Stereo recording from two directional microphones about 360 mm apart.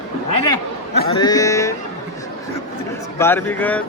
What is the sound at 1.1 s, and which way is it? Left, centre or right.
Speech, centre.